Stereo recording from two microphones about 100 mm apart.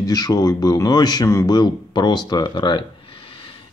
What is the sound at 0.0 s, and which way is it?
Speech, 40° left (ahead or behind).